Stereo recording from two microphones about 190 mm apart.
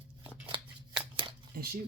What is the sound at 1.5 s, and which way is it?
Speech, 50° right (ahead or behind).